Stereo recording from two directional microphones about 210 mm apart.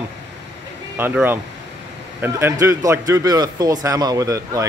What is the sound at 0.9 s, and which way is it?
A man's voice, 10° right (ahead or behind).